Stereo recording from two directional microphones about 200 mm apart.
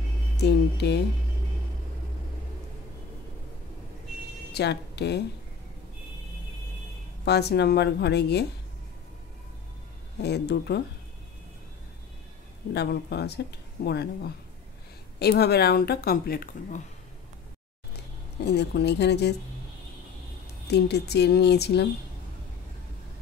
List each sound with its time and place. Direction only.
0.4 s speech: 55° left (ahead or behind)
4.5 s speech: 55° left (ahead or behind)
7.2 s speech: 55° left (ahead or behind)
10.2 s speech: 55° left (ahead or behind)
12.7 s speech: 55° left (ahead or behind)
18.4 s speech: 55° left (ahead or behind)
20.6 s speech: 55° left (ahead or behind)